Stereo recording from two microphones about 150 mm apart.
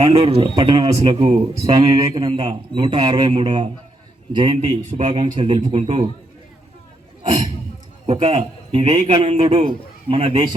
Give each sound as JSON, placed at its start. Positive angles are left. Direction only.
{"t": 0.0, "sound": "speech", "side_deg": -45}
{"t": 0.9, "sound": "speech", "side_deg": -40}
{"t": 1.7, "sound": "a man's voice", "side_deg": -25}
{"t": 4.8, "sound": "a man's voice", "side_deg": -55}
{"t": 5.1, "sound": "speech", "side_deg": -35}
{"t": 5.7, "sound": "speech", "side_deg": -40}
{"t": 7.2, "sound": "a man's voice", "side_deg": -35}